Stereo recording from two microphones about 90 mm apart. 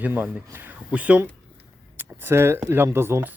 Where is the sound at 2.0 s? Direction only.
25° right (ahead or behind).